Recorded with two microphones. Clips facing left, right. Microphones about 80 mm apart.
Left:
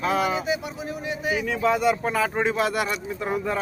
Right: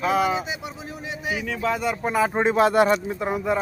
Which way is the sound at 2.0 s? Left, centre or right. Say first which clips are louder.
Right 2 dB; centre.